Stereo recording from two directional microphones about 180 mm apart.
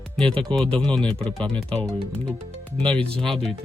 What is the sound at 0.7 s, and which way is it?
Speech, 5° left (ahead or behind).